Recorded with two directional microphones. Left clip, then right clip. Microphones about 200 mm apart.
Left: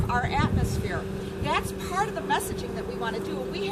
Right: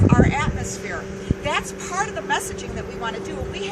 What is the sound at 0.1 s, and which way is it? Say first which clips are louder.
Vehicle: right 2 dB; centre (ahead or behind).